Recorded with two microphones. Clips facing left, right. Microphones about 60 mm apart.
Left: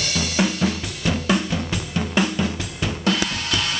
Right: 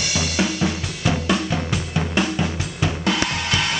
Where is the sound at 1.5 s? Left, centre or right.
Centre.